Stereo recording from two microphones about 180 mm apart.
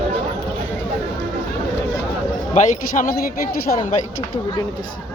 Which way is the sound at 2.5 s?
45° left (ahead or behind).